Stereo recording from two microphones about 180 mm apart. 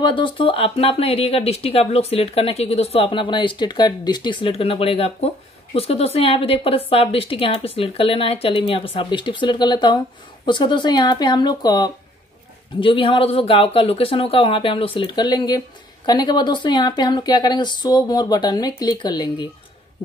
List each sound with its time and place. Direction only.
0.0 s speech: 25° left (ahead or behind)